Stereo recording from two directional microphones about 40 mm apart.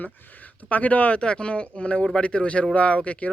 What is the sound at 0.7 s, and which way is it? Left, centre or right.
Speech, left.